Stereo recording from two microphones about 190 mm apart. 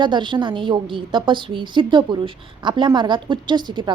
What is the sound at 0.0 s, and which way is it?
A woman's voice, 25° right (ahead or behind).